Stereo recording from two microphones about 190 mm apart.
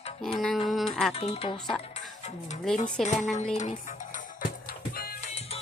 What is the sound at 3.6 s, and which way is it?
Music, 35° left (ahead or behind).